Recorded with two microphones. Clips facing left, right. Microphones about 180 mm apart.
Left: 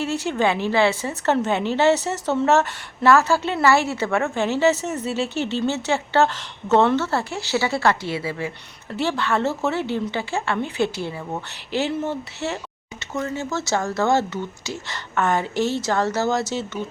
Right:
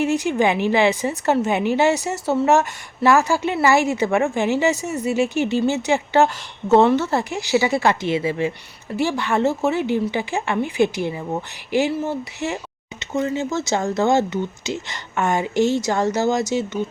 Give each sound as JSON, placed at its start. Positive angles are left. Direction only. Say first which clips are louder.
{"t": 0.0, "sound": "a woman's voice", "louder": "right 3 dB", "side_deg": -15}